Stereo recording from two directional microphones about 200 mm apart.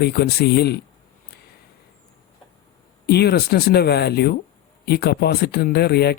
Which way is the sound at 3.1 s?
55° left (ahead or behind).